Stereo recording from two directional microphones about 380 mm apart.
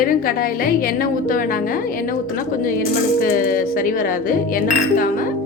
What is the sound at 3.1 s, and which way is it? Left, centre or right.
Speech, left.